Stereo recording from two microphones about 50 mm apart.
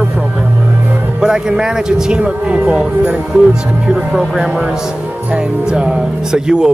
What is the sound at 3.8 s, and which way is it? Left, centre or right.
Speech, centre.